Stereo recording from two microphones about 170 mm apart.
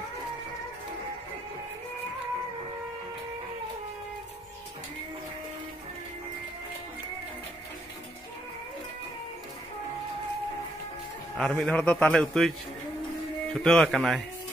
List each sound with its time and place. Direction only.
11.3 s a man's voice: 5° left (ahead or behind)